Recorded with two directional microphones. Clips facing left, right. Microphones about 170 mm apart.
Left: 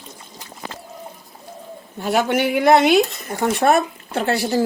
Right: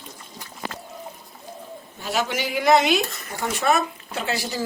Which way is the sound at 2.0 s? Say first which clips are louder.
Left 7 dB; 55° left (ahead or behind).